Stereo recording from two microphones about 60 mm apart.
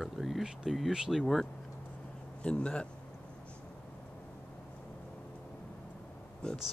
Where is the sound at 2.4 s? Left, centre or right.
Centre.